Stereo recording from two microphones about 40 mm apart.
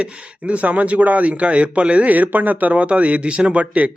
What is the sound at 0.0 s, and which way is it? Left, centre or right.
Speech, right.